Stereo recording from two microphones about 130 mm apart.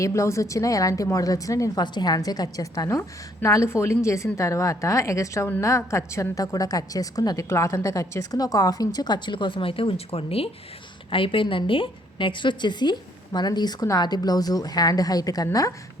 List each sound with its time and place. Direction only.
0.0 s a woman's voice: 20° left (ahead or behind)